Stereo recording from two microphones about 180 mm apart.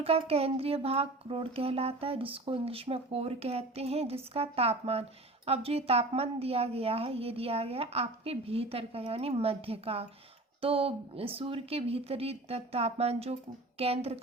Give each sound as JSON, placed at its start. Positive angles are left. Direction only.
{"t": 0.0, "sound": "speech", "side_deg": -35}